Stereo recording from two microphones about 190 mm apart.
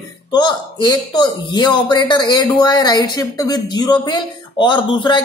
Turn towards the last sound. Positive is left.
turn(degrees=25)  # may be behind; listen again after turning